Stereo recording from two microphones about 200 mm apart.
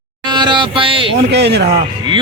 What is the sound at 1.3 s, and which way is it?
Speech, 60° right (ahead or behind).